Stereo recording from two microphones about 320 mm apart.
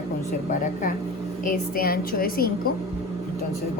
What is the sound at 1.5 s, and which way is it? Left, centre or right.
A woman's voice, left.